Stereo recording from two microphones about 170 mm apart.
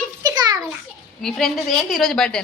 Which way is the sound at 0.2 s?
25° right (ahead or behind).